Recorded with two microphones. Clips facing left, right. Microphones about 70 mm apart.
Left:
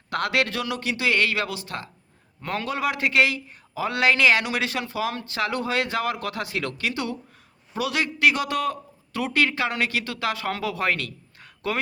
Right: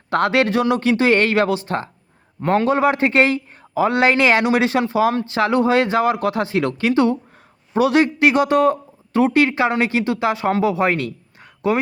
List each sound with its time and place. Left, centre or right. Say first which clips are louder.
0.1 s a man's voice: right 8 dB; right